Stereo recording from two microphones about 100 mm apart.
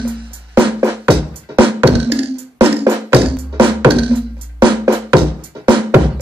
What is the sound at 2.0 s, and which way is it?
Music, 80° right.